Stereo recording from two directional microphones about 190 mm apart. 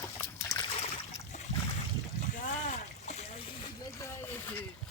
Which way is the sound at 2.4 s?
40° left (ahead or behind).